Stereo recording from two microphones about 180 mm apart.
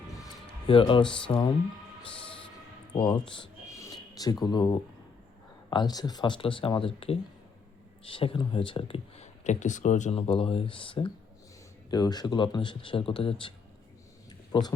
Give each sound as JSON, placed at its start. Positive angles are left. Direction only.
{"t": 0.7, "sound": "speech", "side_deg": 30}
{"t": 1.0, "sound": "speech", "side_deg": 5}
{"t": 1.3, "sound": "speech", "side_deg": 25}
{"t": 2.9, "sound": "speech", "side_deg": 25}
{"t": 3.8, "sound": "a sound", "side_deg": 20}
{"t": 5.7, "sound": "speech", "side_deg": 20}
{"t": 14.3, "sound": "a sound", "side_deg": 25}